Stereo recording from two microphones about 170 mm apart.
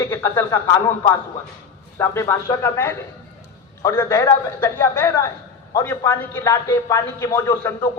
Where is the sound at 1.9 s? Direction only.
15° left (ahead or behind).